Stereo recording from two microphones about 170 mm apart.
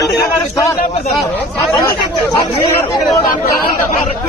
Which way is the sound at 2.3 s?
25° left (ahead or behind).